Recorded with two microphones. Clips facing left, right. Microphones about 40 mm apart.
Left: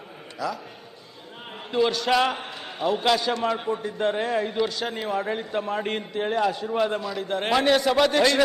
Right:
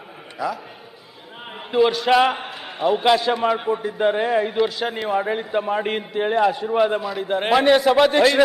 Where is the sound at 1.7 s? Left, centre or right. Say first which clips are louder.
Right 5 dB; centre.